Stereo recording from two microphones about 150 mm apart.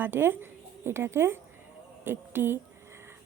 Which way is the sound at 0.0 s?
15° right (ahead or behind).